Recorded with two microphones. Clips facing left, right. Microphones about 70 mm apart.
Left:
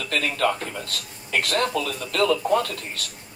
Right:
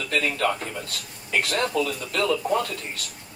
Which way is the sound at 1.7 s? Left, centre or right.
Left.